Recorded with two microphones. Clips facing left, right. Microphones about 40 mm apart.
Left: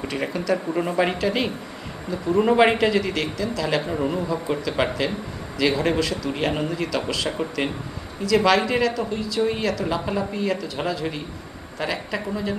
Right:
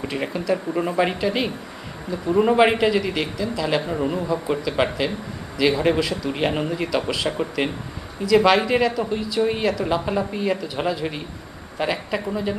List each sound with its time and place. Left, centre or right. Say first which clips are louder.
0.1 s a man's voice: even; centre
7.3 s speech: right 2 dB; centre
8.3 s a man's voice: right 2 dB; centre